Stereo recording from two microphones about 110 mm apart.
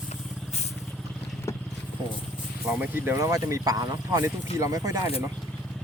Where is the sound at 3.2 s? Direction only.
30° right (ahead or behind).